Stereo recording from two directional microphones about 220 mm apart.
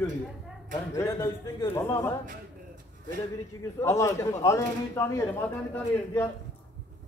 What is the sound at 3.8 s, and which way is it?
A man's voice, 15° left (ahead or behind).